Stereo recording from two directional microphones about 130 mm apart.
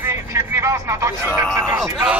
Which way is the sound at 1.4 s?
5° left (ahead or behind).